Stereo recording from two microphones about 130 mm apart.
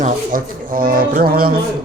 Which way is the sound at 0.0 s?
90° right.